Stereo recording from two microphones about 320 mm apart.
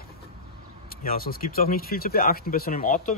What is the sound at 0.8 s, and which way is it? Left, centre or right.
Speech, left.